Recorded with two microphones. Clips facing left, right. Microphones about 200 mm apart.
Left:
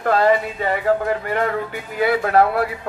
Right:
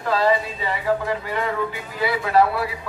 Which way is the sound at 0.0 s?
55° left (ahead or behind).